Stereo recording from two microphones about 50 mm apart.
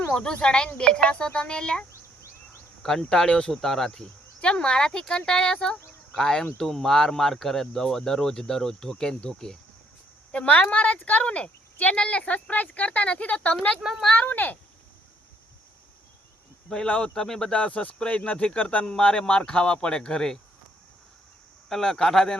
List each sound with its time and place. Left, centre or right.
0.1 s speech: centre
2.8 s speech: centre
4.4 s speech: centre
10.3 s speech: left
14.2 s speech: left
16.6 s speech: centre
17.5 s speech: left
21.7 s speech: centre